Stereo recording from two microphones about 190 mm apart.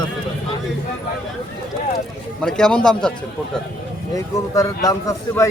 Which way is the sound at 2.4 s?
5° left (ahead or behind).